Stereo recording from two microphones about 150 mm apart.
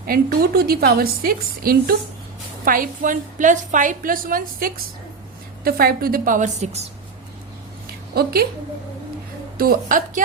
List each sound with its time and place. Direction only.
0.1 s a woman's voice: 80° right
5.6 s a woman's voice: 80° right; by 6.8 s 50° right (ahead or behind)
8.1 s a woman's voice: 90° right
9.6 s a woman's voice: 80° right